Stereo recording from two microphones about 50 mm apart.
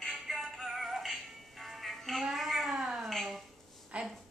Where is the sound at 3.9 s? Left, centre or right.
Right.